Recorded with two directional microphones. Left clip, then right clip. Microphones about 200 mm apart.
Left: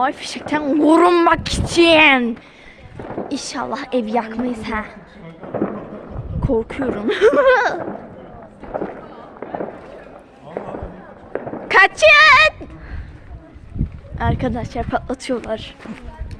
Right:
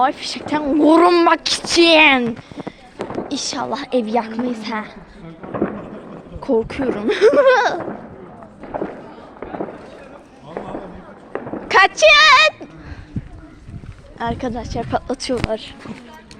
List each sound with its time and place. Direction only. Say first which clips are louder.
0.0 s a woman's voice: right 2 dB; 5° left (ahead or behind)
3.2 s a woman's voice: right 1 dB; centre (ahead or behind)
6.4 s a woman's voice: right 1 dB; 5° right (ahead or behind)
9.4 s fireworks: left 2 dB; 10° right (ahead or behind)
11.3 s a sound: left 1 dB; 20° right (ahead or behind)
11.7 s a woman's voice: even; 10° left (ahead or behind)
14.2 s a woman's voice: left 1 dB; 15° left (ahead or behind)
14.8 s a woman's voice: right 2 dB; centre (ahead or behind)